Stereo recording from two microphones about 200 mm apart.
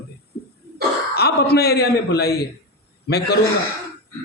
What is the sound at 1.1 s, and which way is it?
A woman's voice, 55° left (ahead or behind).